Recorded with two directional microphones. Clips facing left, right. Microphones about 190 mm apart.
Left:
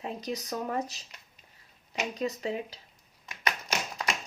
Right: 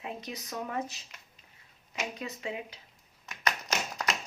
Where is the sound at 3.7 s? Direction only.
10° left (ahead or behind).